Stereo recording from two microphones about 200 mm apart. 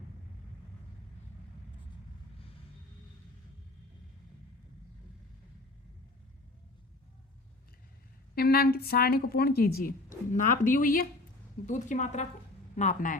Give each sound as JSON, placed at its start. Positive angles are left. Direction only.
{"t": 8.4, "sound": "a woman's voice", "side_deg": 50}